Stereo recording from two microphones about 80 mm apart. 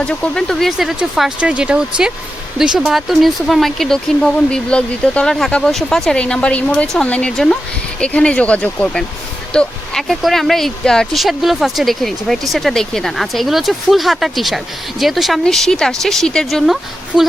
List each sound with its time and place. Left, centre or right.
0.0 s speech: centre
0.8 s speech: centre
1.4 s speech: centre
6.8 s speech: centre